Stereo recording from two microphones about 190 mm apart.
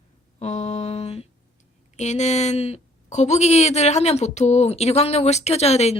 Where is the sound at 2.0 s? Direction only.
35° left (ahead or behind).